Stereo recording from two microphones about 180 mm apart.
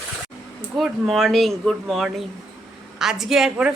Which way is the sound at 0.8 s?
Centre (ahead or behind).